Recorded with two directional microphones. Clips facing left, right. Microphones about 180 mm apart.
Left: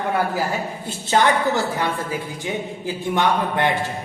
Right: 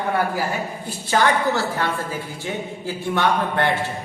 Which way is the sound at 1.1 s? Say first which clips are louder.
Left 1 dB; 25° left (ahead or behind).